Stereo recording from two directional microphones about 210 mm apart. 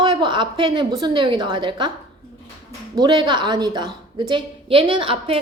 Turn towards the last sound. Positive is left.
turn(degrees=-25)  # may be behind; listen again after turning